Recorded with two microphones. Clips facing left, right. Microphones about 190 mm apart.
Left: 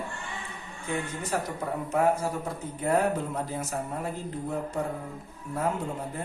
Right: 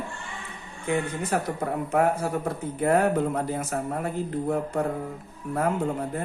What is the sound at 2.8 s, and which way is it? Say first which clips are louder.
Speech: right 3 dB; 55° right (ahead or behind).